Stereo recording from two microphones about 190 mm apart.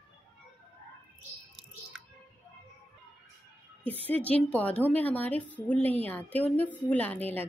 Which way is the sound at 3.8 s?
30° right (ahead or behind).